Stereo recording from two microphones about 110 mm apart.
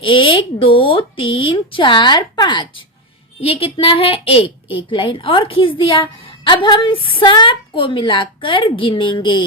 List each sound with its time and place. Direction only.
0.0 s a woman's voice: 50° left (ahead or behind)
3.4 s a woman's voice: 60° left (ahead or behind)
4.9 s a woman's voice: 50° left (ahead or behind)